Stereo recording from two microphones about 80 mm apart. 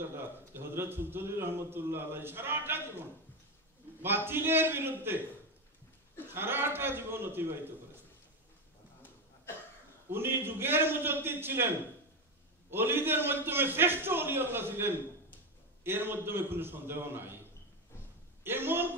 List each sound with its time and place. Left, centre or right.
0.6 s a man's voice: right
4.3 s a man's voice: right
6.3 s a man's voice: right
10.0 s a man's voice: right
12.7 s a man's voice: right
18.4 s a man's voice: right